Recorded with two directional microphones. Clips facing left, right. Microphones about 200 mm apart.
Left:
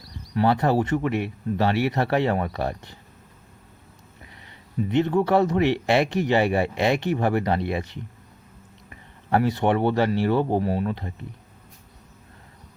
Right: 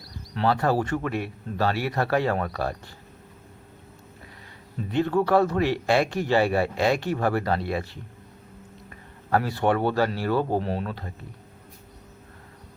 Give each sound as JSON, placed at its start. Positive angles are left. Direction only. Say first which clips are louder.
{"t": 0.3, "sound": "speech", "louder": "left 3 dB", "side_deg": 20}
{"t": 4.9, "sound": "speech", "louder": "left 1 dB", "side_deg": 20}
{"t": 9.3, "sound": "speech", "louder": "left 2 dB", "side_deg": 20}